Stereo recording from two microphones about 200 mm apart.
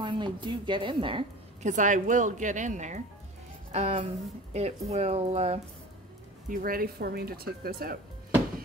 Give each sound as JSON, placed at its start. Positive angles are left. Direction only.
{"t": 0.0, "sound": "a woman's voice", "side_deg": -25}
{"t": 6.5, "sound": "speech", "side_deg": -45}